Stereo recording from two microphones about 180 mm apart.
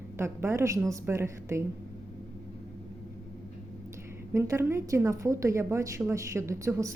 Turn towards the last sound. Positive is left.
turn(degrees=-15)  # may be behind; listen again after turning